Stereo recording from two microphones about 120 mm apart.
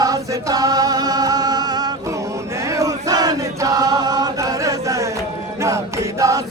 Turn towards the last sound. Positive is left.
turn(degrees=-30)  # may be behind; listen again after turning